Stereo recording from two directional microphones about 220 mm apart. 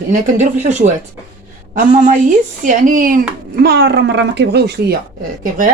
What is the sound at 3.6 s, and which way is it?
A woman's voice, 50° right (ahead or behind).